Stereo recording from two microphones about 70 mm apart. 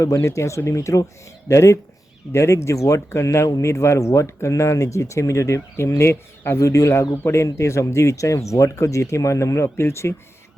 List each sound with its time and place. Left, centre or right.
0.0 s speech: left